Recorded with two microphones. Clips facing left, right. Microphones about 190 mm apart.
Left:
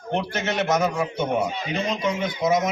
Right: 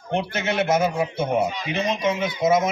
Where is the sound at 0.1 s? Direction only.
25° right (ahead or behind).